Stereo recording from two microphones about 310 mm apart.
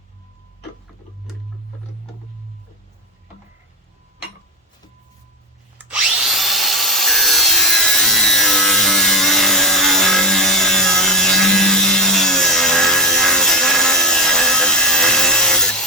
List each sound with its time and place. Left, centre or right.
5.7 s wood: centre